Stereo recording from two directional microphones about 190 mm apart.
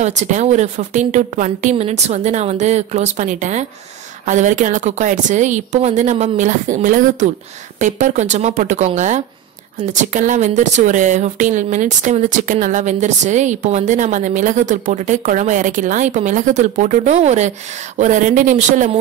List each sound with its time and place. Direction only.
0.0 s speech: 35° right (ahead or behind)